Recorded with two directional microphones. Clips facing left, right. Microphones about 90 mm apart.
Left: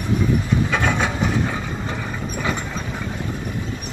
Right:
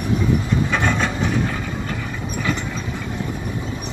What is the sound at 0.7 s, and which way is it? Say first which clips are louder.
Wood: even; 5° left (ahead or behind).